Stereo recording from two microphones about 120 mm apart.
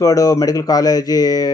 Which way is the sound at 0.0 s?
30° left (ahead or behind).